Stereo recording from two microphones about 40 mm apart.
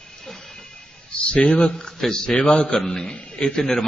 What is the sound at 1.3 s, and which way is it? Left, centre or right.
Speech, left.